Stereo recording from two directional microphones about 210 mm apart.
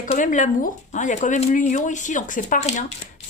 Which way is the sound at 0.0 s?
35° left (ahead or behind).